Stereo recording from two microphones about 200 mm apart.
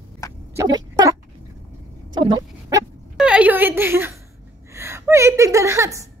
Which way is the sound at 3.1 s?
5° right (ahead or behind).